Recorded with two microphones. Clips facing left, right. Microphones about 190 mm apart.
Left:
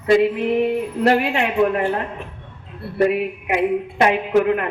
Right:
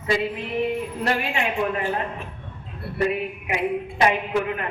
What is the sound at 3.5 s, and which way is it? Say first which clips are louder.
A man's voice: left 5 dB; 60° left (ahead or behind).